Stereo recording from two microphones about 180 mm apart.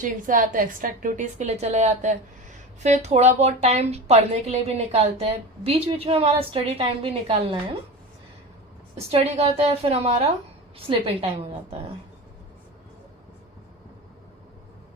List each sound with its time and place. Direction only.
0.0 s a woman's voice: 45° right (ahead or behind); by 7.6 s 30° right (ahead or behind)
9.0 s a woman's voice: 35° right (ahead or behind)